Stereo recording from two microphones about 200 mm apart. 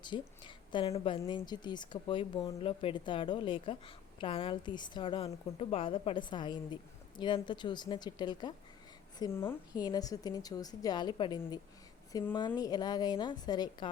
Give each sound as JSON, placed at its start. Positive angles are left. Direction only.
{"t": 0.0, "sound": "speech", "side_deg": 25}